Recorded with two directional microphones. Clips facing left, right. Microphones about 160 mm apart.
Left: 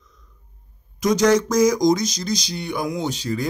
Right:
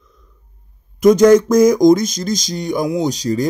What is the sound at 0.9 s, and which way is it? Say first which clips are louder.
Speech: right 8 dB; 50° right (ahead or behind).